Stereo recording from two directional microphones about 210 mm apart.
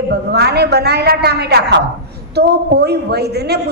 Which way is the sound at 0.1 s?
50° right (ahead or behind).